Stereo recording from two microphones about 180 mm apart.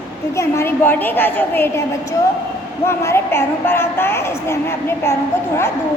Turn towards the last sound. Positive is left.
turn(degrees=15)  # may be behind; listen again after turning